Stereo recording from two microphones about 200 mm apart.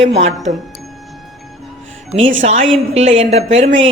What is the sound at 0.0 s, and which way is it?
Speech, 30° right (ahead or behind).